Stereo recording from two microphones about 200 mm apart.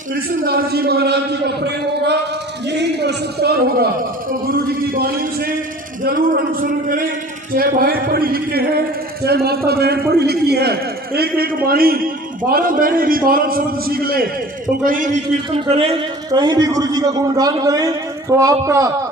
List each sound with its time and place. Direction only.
0.1 s a man's voice: 50° right (ahead or behind)
14.8 s a man's voice: 40° right (ahead or behind); by 18.9 s 15° right (ahead or behind)